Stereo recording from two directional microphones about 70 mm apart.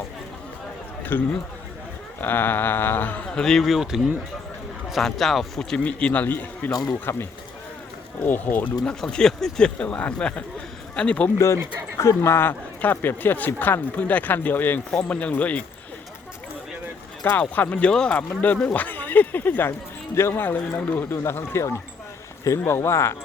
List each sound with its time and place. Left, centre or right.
1.1 s speech: left
3.2 s speech: centre
5.7 s speech: centre
6.2 s speech: left
6.7 s speech: left
7.0 s speech: left
9.0 s speech: centre
11.9 s speech: left
17.2 s speech: left
18.2 s speech: left